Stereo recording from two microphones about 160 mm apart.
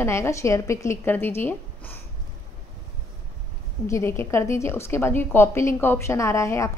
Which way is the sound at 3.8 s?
15° left (ahead or behind).